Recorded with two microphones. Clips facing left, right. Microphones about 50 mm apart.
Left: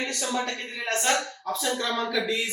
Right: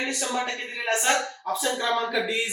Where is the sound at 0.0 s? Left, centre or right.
Right.